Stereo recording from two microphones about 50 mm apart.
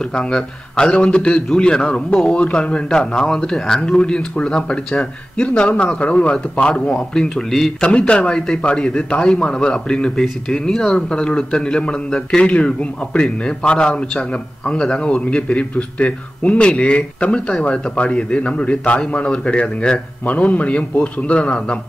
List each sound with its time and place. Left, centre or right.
0.1 s speech: centre
7.8 s speech: centre
21.4 s speech: centre